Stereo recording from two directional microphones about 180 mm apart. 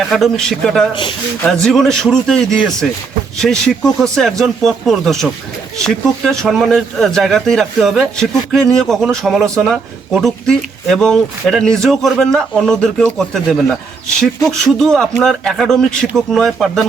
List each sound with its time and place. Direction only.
0.1 s a man's voice: centre (ahead or behind)